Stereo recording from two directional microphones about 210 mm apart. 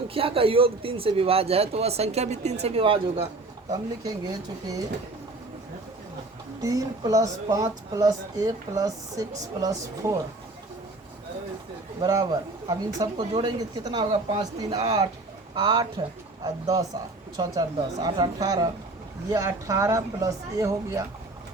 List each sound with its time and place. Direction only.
0.1 s speech: 25° right (ahead or behind)
6.6 s speech: 15° right (ahead or behind)
11.9 s speech: 20° right (ahead or behind)